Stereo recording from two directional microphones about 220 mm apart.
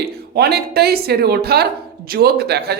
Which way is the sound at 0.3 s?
45° right (ahead or behind).